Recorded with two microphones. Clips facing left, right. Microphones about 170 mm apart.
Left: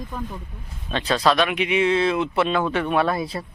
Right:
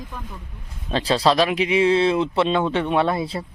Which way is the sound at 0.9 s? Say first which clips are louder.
Right 2 dB; 30° right (ahead or behind).